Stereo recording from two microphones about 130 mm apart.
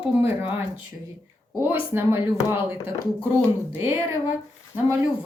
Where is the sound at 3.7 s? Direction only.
20° right (ahead or behind).